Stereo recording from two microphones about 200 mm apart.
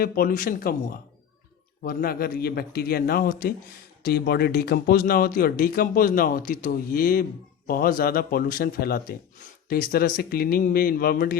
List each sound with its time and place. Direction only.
0.0 s speech: 45° left (ahead or behind)